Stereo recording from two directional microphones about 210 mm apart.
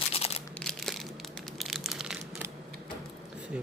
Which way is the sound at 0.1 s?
30° left (ahead or behind).